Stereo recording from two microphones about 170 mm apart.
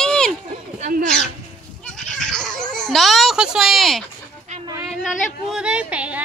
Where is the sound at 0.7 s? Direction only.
50° right (ahead or behind).